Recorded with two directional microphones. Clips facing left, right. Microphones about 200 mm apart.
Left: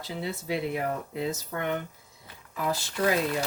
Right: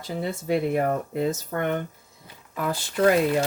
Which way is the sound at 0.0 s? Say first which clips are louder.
Right 4 dB; 50° right (ahead or behind).